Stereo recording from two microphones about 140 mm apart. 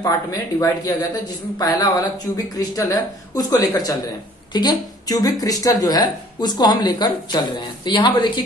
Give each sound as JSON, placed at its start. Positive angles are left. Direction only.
{"t": 0.0, "sound": "speech", "side_deg": 25}